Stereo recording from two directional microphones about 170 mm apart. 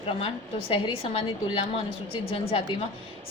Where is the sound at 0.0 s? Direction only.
35° left (ahead or behind).